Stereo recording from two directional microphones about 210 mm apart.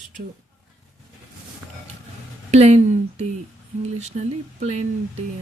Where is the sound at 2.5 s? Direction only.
30° right (ahead or behind).